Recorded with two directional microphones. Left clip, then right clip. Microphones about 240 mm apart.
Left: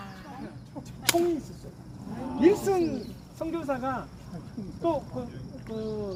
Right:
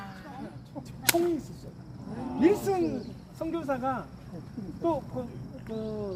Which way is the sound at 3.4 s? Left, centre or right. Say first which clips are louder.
Even; centre.